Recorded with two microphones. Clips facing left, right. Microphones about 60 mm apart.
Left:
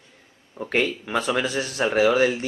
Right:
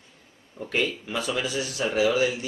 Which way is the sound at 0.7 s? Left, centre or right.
Left.